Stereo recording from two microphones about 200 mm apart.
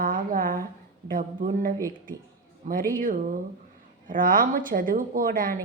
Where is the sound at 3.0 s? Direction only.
45° right (ahead or behind).